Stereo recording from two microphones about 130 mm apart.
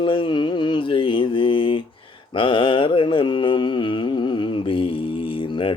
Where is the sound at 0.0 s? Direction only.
40° left (ahead or behind).